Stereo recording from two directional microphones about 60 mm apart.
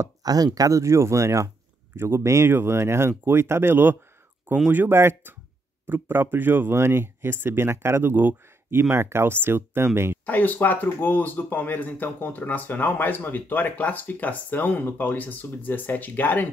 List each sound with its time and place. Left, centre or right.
0.0 s a sound: right
0.6 s speech: right
2.0 s speech: right
6.8 s speech: right
10.2 s speech: left